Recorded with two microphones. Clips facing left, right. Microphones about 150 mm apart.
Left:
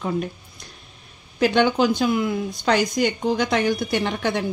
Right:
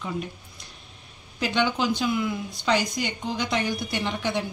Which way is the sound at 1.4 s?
55° left (ahead or behind).